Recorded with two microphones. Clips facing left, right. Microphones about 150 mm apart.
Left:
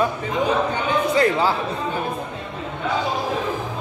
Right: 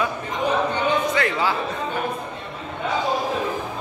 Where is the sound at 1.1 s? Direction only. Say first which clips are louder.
Left 4 dB; 40° left (ahead or behind).